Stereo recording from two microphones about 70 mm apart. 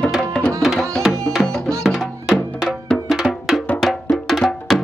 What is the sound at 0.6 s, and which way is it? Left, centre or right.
Music, centre.